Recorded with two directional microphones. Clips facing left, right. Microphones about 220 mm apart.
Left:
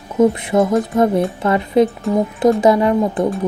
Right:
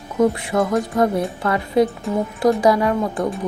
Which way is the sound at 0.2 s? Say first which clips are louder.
Left 4 dB; 20° left (ahead or behind).